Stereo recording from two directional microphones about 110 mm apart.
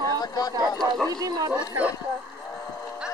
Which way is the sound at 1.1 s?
35° right (ahead or behind).